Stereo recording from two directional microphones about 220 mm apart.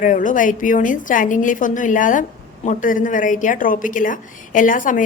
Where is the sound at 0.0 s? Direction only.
35° left (ahead or behind).